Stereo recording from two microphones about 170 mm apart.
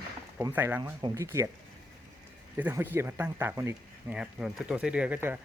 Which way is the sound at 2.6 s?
10° right (ahead or behind).